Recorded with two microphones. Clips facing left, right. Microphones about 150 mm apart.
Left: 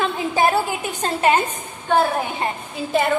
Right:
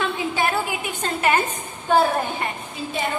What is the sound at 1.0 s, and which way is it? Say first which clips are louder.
Speech: left 3 dB; 25° left (ahead or behind).